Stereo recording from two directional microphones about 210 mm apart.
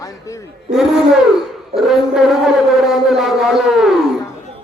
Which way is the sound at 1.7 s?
Centre (ahead or behind).